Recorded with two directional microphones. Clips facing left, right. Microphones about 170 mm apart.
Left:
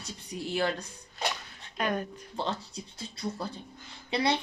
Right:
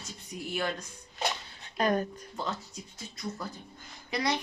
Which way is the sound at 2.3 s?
30° left (ahead or behind).